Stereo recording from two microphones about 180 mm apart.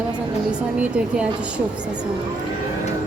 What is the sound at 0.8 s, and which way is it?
Speech, 5° right (ahead or behind).